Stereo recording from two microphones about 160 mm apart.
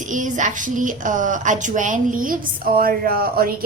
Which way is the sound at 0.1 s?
55° right (ahead or behind).